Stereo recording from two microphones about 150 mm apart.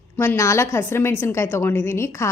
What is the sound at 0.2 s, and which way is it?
A woman's voice, 20° left (ahead or behind).